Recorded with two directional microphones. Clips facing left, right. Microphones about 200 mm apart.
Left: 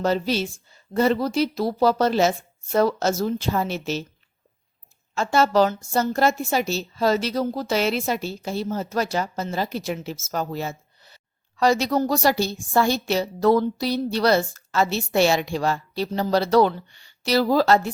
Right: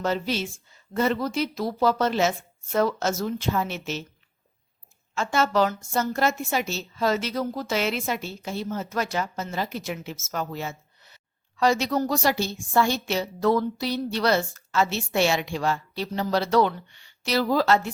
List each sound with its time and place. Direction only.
0.0 s a woman's voice: 35° left (ahead or behind)
5.1 s a woman's voice: 35° left (ahead or behind)